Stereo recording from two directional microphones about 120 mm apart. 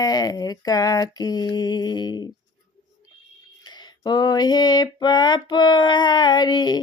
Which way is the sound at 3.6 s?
35° left (ahead or behind).